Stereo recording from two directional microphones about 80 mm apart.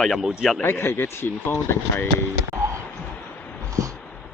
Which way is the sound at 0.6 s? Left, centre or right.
Left.